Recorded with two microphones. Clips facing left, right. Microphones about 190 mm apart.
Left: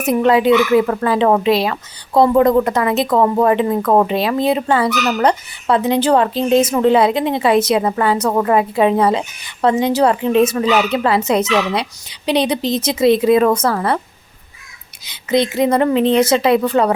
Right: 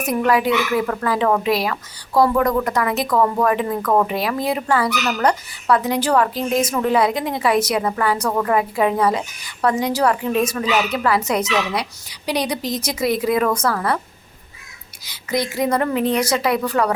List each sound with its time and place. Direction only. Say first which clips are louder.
0.0 s speech: left 5 dB; 25° left (ahead or behind)
15.0 s speech: left 7 dB; 20° left (ahead or behind)